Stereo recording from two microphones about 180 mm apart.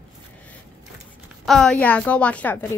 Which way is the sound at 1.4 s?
5° left (ahead or behind).